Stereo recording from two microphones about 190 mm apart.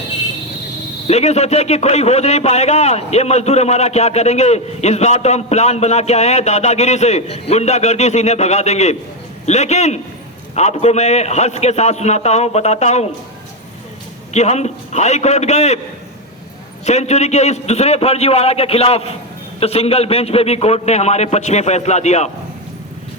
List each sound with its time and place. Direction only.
1.0 s a man's voice: 35° left (ahead or behind)
14.3 s a man's voice: 35° left (ahead or behind)
16.8 s a man's voice: 35° left (ahead or behind)